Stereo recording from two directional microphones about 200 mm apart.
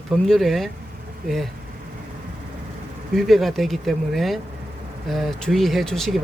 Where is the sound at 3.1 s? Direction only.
Centre (ahead or behind).